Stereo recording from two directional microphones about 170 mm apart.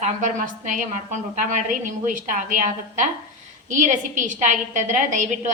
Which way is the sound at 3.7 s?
50° right (ahead or behind).